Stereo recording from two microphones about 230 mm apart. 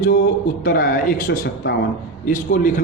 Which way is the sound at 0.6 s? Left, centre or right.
Left.